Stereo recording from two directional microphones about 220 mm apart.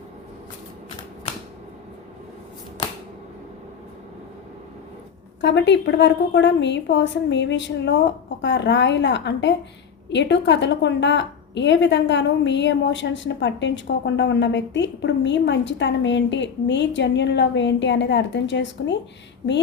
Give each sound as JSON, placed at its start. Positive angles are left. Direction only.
{"t": 5.4, "sound": "a woman's voice", "side_deg": 55}